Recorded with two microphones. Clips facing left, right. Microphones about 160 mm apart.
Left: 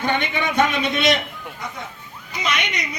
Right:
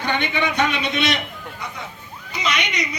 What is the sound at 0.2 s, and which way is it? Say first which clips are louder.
Speech: left 1 dB; 45° left (ahead or behind).